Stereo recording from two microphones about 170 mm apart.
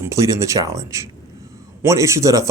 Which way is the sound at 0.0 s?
20° right (ahead or behind).